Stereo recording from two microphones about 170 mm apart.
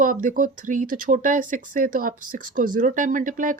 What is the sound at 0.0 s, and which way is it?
Speech, 50° right (ahead or behind).